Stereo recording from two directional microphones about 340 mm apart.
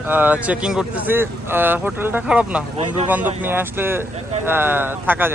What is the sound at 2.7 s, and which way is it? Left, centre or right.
Speech, centre.